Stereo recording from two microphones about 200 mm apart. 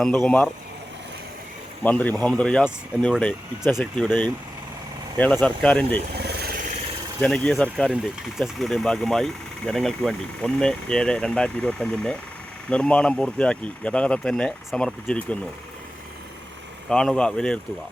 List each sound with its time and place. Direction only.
0.0 s speech: 5° left (ahead or behind)
1.8 s speech: 10° left (ahead or behind)
6.1 s vehicle: 55° right (ahead or behind)
7.2 s speech: 5° left (ahead or behind)
16.9 s speech: 5° left (ahead or behind)